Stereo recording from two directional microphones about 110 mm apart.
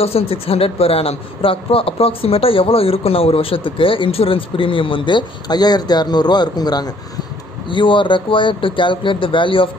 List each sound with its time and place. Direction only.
0.0 s speech: 65° left (ahead or behind); by 6.9 s 35° left (ahead or behind)
7.7 s speech: 50° left (ahead or behind)